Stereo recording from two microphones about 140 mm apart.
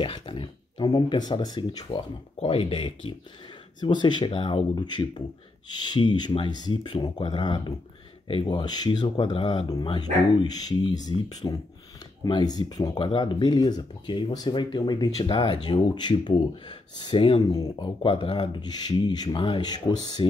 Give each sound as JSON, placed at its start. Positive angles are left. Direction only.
{"t": 0.0, "sound": "speech", "side_deg": 40}